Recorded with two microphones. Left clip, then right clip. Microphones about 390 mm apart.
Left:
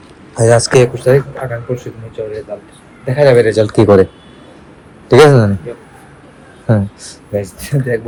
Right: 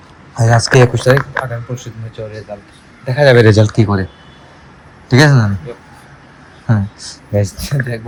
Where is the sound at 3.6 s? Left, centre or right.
Centre.